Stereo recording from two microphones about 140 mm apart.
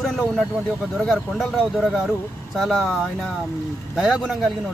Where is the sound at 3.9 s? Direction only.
5° right (ahead or behind).